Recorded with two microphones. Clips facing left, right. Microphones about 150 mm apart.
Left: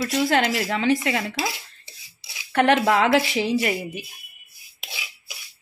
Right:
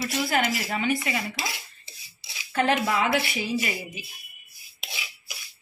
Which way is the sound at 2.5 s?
70° left (ahead or behind).